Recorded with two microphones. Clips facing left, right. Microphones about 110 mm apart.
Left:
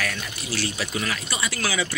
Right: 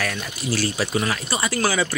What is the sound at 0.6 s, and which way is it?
Speech, 40° right (ahead or behind).